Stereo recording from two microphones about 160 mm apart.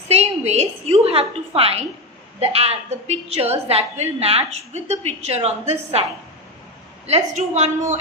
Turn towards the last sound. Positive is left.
turn(degrees=-45)  # may be behind; listen again after turning